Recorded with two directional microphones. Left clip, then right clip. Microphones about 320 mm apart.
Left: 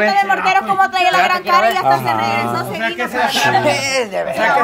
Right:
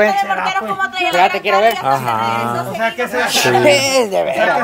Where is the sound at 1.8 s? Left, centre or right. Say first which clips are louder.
Left 1 dB; centre.